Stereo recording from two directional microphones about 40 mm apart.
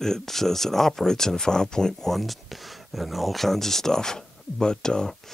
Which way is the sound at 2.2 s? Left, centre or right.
Centre.